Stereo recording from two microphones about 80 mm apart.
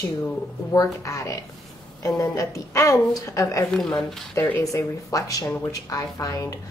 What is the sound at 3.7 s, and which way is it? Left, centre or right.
Speech, centre.